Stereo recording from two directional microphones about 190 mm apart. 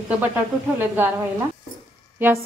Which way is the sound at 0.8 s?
10° right (ahead or behind).